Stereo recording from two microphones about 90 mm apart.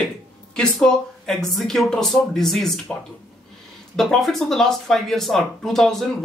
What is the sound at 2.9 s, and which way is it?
Speech, 20° left (ahead or behind).